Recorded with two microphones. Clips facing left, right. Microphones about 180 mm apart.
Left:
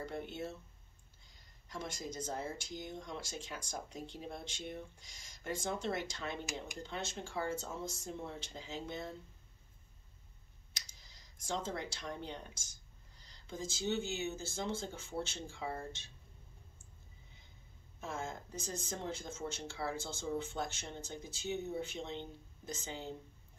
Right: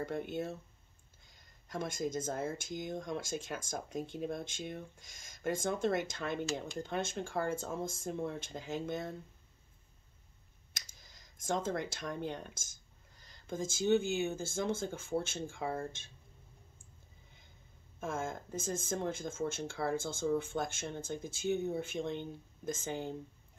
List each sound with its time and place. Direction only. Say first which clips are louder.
0.0 s speech: right 5 dB; 50° right (ahead or behind)
10.7 s speech: right 1 dB; 50° right (ahead or behind)
18.0 s speech: right 4 dB; 50° right (ahead or behind)